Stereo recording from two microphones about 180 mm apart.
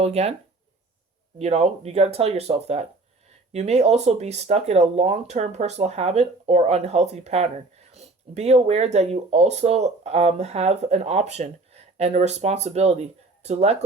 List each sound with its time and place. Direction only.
0.0 s speech: 35° right (ahead or behind)
1.4 s speech: 40° right (ahead or behind)